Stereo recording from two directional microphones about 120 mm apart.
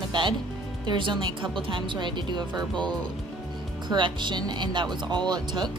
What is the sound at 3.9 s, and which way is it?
A woman's voice, 40° right (ahead or behind).